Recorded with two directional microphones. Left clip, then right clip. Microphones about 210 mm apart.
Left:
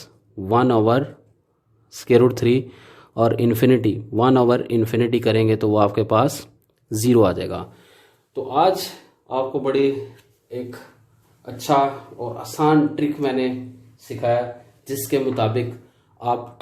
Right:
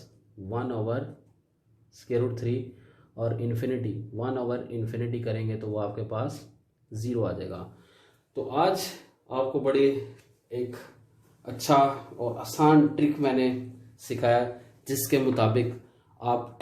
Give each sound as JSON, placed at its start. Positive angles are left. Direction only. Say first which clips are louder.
{"t": 0.4, "sound": "speech", "louder": "left 15 dB", "side_deg": 50}
{"t": 11.4, "sound": "speech", "louder": "left 3 dB", "side_deg": 0}
{"t": 14.8, "sound": "speech", "louder": "left 4 dB", "side_deg": -5}
{"t": 16.1, "sound": "speech", "louder": "left 5 dB", "side_deg": 10}